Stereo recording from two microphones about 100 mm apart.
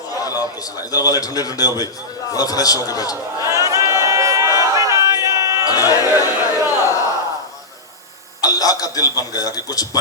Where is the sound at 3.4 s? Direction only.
30° right (ahead or behind).